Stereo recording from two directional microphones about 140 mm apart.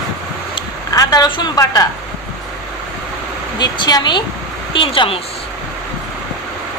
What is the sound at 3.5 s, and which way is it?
A woman's voice, 30° left (ahead or behind).